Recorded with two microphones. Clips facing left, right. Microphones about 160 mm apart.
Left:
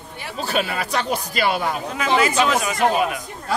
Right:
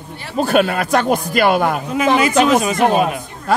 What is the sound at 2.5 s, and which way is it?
Speech, 25° right (ahead or behind).